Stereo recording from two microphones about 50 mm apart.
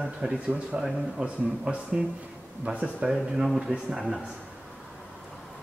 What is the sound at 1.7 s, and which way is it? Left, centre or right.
Speech, right.